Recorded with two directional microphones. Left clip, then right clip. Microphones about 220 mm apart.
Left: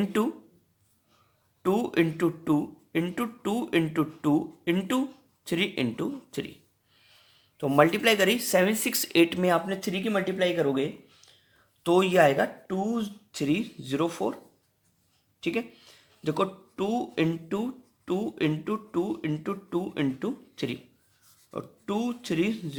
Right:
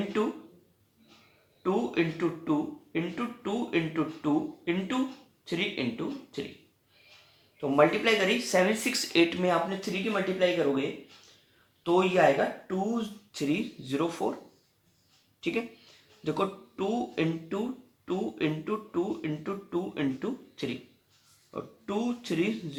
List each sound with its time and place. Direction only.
0.1 s speech: 50° left (ahead or behind)
1.6 s speech: 50° left (ahead or behind)
7.6 s speech: 50° left (ahead or behind)
15.4 s speech: 50° left (ahead or behind)